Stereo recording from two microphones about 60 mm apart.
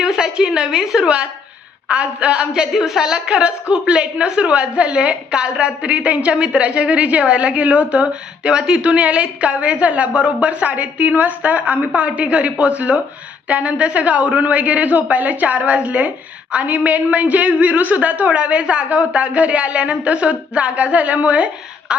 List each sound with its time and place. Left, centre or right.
0.0 s a woman's voice: centre
2.5 s a woman's voice: centre; by 21.9 s right